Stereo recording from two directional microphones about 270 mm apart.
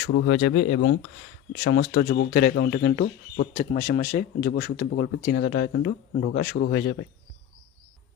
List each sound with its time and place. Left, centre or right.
0.1 s speech: left
0.3 s speech: left